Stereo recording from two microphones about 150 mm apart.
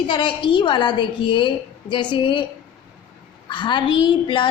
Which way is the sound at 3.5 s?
30° left (ahead or behind).